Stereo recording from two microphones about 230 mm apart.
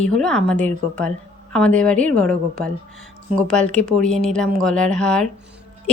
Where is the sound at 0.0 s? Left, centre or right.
Centre.